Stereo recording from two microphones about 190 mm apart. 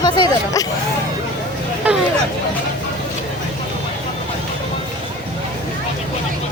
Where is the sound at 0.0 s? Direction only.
20° left (ahead or behind).